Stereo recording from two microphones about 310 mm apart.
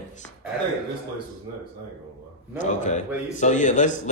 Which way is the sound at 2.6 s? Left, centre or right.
Left.